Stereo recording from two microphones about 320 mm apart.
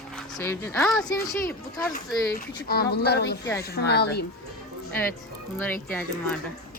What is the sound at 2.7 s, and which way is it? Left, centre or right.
Speech, left.